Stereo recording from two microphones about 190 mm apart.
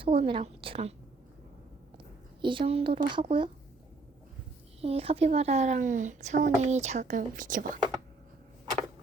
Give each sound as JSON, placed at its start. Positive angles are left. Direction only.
{"t": 0.0, "sound": "a woman's voice", "side_deg": -30}
{"t": 2.4, "sound": "a woman's voice", "side_deg": -25}
{"t": 4.8, "sound": "speech", "side_deg": -30}